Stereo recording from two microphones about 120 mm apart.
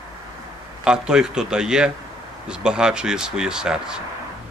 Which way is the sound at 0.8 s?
5° right (ahead or behind).